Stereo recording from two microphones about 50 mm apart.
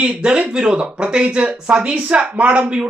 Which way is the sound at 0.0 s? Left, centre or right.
Centre.